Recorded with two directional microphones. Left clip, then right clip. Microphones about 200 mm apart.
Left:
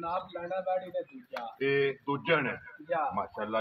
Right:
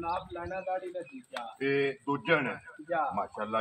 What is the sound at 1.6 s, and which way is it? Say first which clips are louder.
A man's voice: left 1 dB; 30° left (ahead or behind).